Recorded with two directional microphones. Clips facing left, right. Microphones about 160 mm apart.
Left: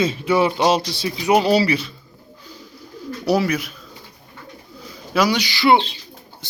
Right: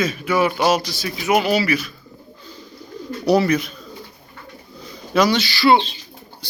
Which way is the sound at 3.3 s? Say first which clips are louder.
Right 3 dB; 5° left (ahead or behind).